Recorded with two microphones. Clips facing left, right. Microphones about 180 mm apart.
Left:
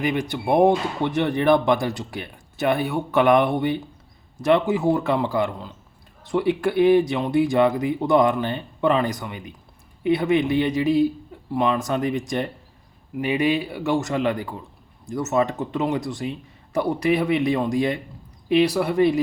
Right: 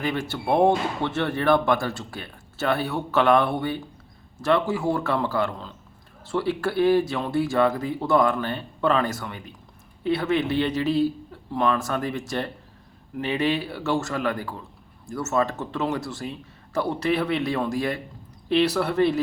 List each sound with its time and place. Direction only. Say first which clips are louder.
0.0 s a man's voice: left 3 dB; 15° left (ahead or behind)